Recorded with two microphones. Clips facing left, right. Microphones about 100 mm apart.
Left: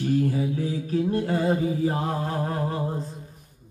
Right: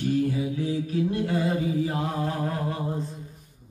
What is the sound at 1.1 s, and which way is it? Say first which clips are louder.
Mantra: left 2 dB; 35° left (ahead or behind).